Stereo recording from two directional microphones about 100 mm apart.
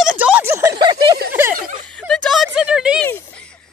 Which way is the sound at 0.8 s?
45° right (ahead or behind).